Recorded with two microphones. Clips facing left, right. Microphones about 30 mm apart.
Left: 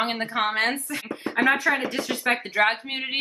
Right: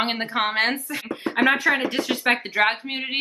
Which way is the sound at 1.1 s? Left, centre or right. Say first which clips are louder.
Right 2 dB; right.